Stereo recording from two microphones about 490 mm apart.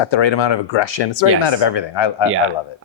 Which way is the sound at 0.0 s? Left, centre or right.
Left.